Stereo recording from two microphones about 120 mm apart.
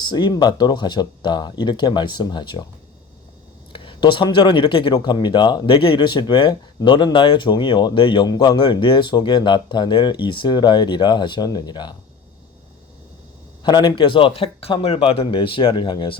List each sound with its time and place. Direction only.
0.0 s speech: 40° left (ahead or behind)
3.7 s speech: 45° left (ahead or behind)
13.6 s a man's voice: 40° left (ahead or behind)